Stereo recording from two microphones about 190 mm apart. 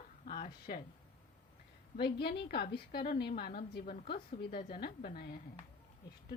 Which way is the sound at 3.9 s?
30° left (ahead or behind).